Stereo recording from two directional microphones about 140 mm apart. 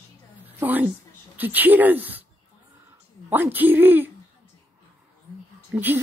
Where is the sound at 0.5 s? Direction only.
10° right (ahead or behind).